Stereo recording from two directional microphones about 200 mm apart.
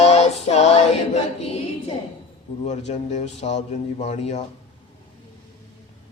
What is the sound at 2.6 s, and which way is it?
A man's voice, 35° left (ahead or behind).